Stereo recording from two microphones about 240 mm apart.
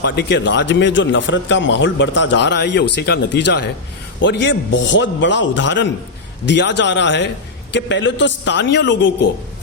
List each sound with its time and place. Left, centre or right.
0.0 s speech: left